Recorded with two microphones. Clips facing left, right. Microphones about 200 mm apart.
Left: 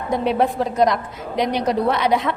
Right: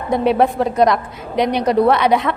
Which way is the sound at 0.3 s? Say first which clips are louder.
Right 5 dB; 65° right (ahead or behind).